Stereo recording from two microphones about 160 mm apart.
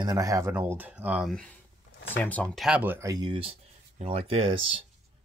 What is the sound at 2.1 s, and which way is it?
Speech, 10° left (ahead or behind).